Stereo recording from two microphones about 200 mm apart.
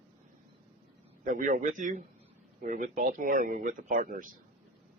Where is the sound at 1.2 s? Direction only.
45° right (ahead or behind).